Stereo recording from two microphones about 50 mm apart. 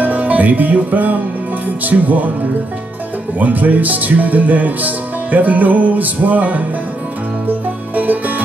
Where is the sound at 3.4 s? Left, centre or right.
Right.